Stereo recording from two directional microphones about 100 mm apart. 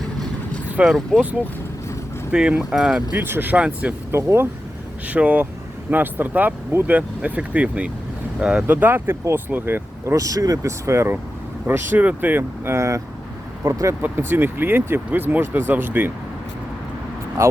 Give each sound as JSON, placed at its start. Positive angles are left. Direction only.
{"t": 0.8, "sound": "speech", "side_deg": 0}
{"t": 2.3, "sound": "speech", "side_deg": -10}
{"t": 3.2, "sound": "speech", "side_deg": -20}
{"t": 4.1, "sound": "speech", "side_deg": -25}
{"t": 5.0, "sound": "speech", "side_deg": -15}
{"t": 8.6, "sound": "speech", "side_deg": -20}
{"t": 10.2, "sound": "speech", "side_deg": -35}
{"t": 14.0, "sound": "speech", "side_deg": -20}